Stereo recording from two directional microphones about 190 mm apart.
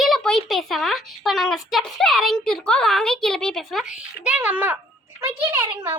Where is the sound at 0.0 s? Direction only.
Centre (ahead or behind).